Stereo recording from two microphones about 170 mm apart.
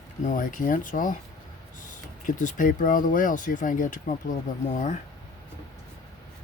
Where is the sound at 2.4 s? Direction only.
50° left (ahead or behind).